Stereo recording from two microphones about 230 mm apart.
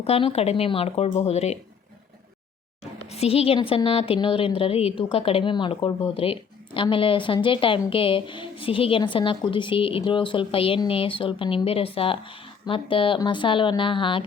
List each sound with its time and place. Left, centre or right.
0.0 s a woman's voice: left
3.1 s a woman's voice: left